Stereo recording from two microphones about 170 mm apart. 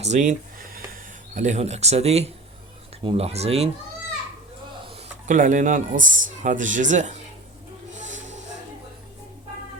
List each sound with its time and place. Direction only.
0.0 s a sound: 45° right (ahead or behind)
1.3 s speech: 45° right (ahead or behind)
5.2 s a man's voice: 50° right (ahead or behind)
7.9 s music: 45° right (ahead or behind)